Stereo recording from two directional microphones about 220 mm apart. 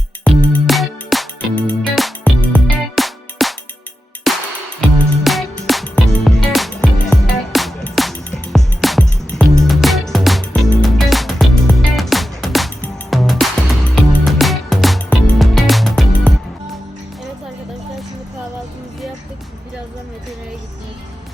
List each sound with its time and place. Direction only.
0.3 s music: 5° left (ahead or behind)